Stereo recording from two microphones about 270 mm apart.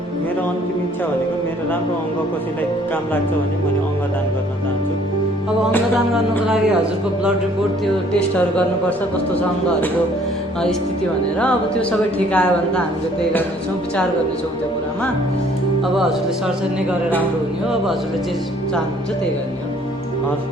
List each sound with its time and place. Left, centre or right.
11.3 s a man's voice: centre